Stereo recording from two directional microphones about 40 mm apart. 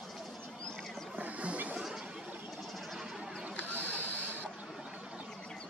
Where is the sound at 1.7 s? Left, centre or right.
Centre.